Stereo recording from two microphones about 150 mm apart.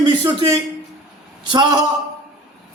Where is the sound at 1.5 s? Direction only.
30° right (ahead or behind).